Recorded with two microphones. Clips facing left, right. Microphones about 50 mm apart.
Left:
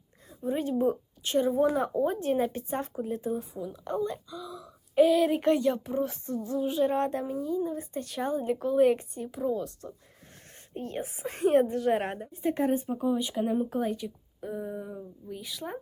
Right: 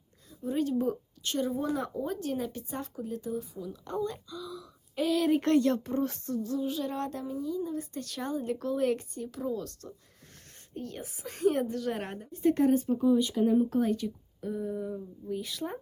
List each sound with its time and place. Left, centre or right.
0.3 s a woman's voice: left; by 6.3 s centre
6.3 s speech: left
10.8 s speech: left
12.3 s speech: centre
15.3 s speech: centre